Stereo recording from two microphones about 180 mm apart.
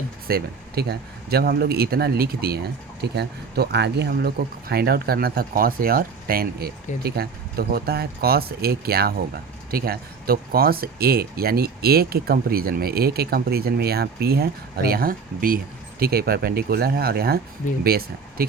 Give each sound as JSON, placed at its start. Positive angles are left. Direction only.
{"t": 0.3, "sound": "speech", "side_deg": -60}